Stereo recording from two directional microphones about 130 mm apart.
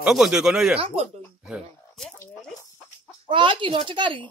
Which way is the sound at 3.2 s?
40° right (ahead or behind).